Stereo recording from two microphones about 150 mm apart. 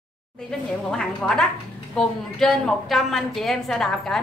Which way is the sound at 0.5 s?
5° left (ahead or behind).